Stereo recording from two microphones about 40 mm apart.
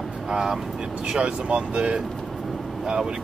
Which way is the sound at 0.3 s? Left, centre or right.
Centre.